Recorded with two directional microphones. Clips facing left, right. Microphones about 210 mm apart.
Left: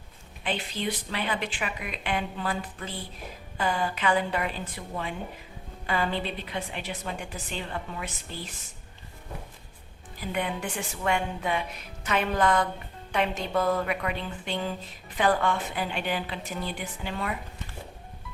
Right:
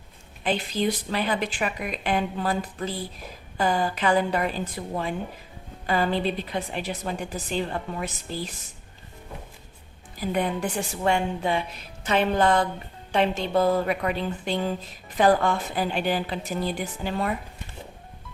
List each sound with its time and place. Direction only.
0.4 s a woman's voice: 40° right (ahead or behind)
10.3 s a woman's voice: 40° right (ahead or behind)